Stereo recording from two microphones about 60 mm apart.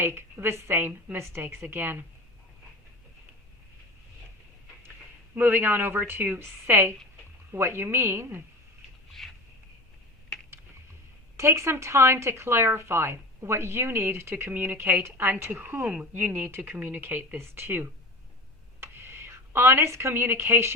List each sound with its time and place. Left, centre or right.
0.0 s a woman's voice: right
5.3 s a woman's voice: right
9.2 s a sound: centre
11.3 s a woman's voice: right
15.8 s speech: centre
16.1 s a woman's voice: right